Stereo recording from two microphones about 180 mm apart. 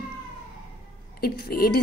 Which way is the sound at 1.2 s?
55° left (ahead or behind).